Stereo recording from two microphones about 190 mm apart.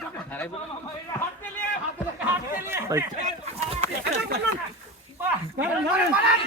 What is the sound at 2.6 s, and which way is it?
Chatter, 15° right (ahead or behind).